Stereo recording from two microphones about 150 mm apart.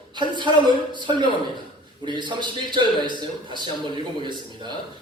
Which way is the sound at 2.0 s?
30° right (ahead or behind).